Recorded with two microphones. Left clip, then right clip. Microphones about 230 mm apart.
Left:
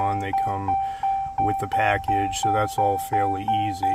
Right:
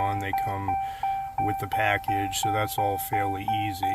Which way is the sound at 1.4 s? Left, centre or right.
Centre.